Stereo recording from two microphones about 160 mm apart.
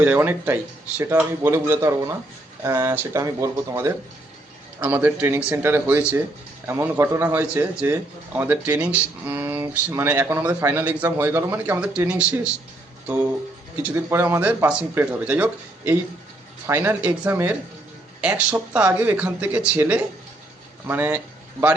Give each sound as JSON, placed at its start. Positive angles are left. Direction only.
{"t": 0.0, "sound": "a man's voice", "side_deg": -10}
{"t": 13.8, "sound": "a man's voice", "side_deg": -15}